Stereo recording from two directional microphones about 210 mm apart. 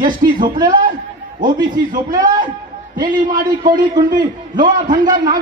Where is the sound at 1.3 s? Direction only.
40° right (ahead or behind).